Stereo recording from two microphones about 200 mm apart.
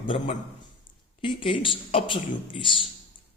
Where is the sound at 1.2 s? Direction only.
25° left (ahead or behind).